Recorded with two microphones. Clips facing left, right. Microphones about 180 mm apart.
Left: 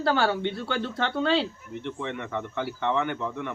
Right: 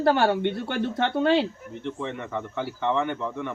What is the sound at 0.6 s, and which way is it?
Speech, 15° right (ahead or behind).